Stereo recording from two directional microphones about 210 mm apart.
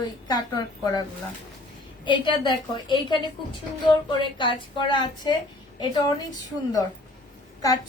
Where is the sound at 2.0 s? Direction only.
20° left (ahead or behind).